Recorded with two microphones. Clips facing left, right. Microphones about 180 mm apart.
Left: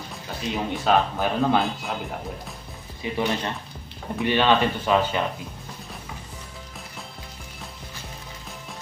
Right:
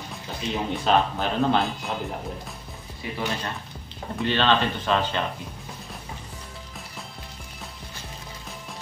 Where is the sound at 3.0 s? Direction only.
20° left (ahead or behind).